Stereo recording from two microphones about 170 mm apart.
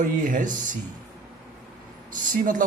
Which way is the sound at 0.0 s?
50° right (ahead or behind).